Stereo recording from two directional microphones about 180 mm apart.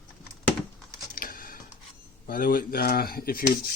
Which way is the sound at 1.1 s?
55° left (ahead or behind).